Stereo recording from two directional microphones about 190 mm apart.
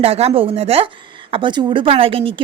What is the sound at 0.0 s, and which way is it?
A woman's voice, 30° right (ahead or behind).